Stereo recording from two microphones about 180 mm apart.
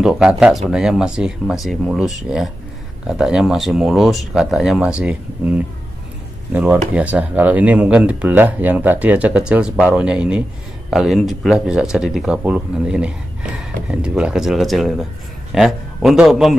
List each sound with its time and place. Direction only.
0.0 s speech: 5° right (ahead or behind)